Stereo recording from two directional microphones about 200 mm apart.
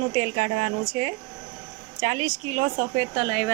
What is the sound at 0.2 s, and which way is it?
Speech, 30° right (ahead or behind).